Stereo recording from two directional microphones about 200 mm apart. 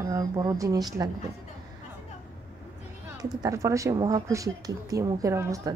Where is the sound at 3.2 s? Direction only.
15° right (ahead or behind).